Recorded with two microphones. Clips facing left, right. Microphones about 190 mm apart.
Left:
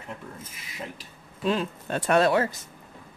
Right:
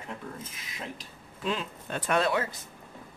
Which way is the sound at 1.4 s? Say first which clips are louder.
Left 6 dB; 40° left (ahead or behind).